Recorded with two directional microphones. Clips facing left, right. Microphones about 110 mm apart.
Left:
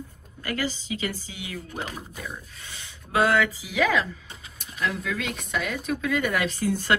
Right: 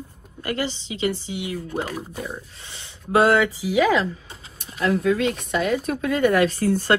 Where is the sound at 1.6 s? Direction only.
45° right (ahead or behind).